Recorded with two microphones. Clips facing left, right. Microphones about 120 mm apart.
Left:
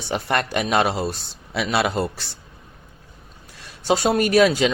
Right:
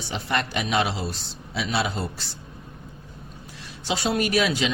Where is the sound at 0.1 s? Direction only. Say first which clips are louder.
Left 5 dB; 55° left (ahead or behind).